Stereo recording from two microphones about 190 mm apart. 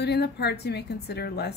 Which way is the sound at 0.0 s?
60° left (ahead or behind).